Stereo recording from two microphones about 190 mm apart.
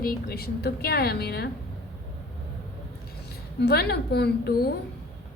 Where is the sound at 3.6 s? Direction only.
55° left (ahead or behind).